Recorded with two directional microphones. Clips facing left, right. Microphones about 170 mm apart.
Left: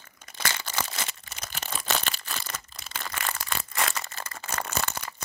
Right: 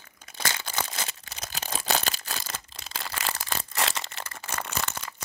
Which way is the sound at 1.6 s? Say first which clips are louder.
Right 2 dB; 40° right (ahead or behind).